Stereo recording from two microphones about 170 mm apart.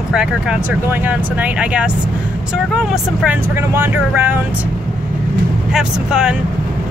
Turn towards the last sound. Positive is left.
turn(degrees=-5)  # may be behind; listen again after turning